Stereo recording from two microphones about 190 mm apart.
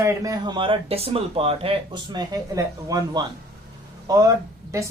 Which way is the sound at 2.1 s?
20° right (ahead or behind).